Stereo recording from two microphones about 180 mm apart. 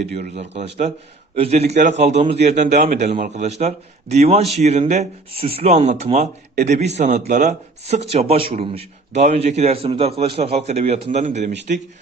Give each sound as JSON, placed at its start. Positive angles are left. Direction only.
{"t": 0.3, "sound": "a man's voice", "side_deg": -35}